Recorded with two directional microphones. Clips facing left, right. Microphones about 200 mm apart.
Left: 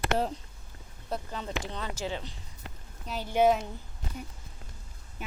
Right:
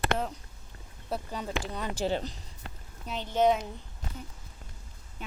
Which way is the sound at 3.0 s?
5° left (ahead or behind).